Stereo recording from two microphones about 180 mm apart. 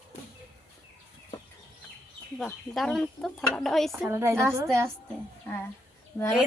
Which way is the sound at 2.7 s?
Centre (ahead or behind).